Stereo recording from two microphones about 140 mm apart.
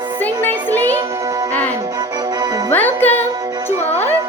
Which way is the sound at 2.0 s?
25° right (ahead or behind).